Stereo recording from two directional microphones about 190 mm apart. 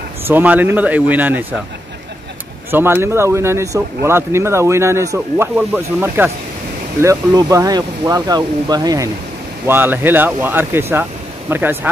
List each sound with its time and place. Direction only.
0.3 s speech: 10° right (ahead or behind)
2.7 s speech: 10° right (ahead or behind)